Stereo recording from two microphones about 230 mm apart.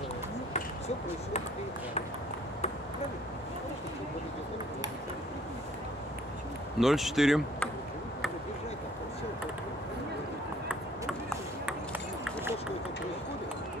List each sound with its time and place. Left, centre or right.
0.5 s ping: left
6.8 s speech: centre
11.1 s ping: centre